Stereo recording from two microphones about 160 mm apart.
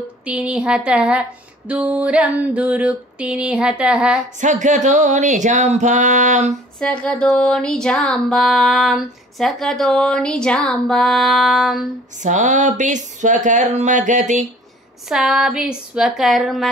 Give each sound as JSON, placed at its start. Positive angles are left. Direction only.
{"t": 0.2, "sound": "mantra", "side_deg": -5}
{"t": 4.4, "sound": "speech", "side_deg": -50}
{"t": 6.8, "sound": "music", "side_deg": 5}
{"t": 12.2, "sound": "speech", "side_deg": -50}
{"t": 15.0, "sound": "music", "side_deg": -5}